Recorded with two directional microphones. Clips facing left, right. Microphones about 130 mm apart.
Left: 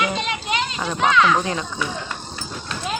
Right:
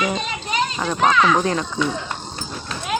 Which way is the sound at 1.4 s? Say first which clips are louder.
Right 4 dB; 10° left (ahead or behind).